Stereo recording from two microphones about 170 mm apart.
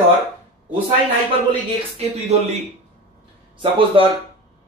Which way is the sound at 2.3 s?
40° right (ahead or behind).